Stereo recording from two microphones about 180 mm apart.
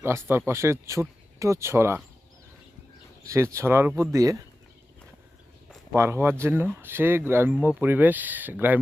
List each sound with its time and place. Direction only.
0.0 s speech: 15° right (ahead or behind)
3.2 s speech: 15° right (ahead or behind)
5.9 s speech: 15° right (ahead or behind)